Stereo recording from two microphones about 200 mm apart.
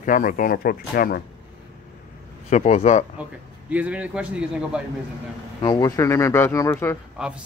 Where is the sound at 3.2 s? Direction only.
5° right (ahead or behind).